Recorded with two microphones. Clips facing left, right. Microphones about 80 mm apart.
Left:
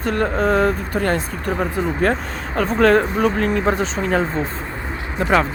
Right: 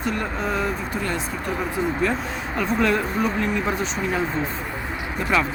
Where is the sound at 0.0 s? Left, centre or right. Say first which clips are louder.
Left 7 dB; left.